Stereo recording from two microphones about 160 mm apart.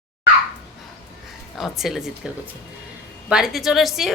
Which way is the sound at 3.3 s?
5° right (ahead or behind).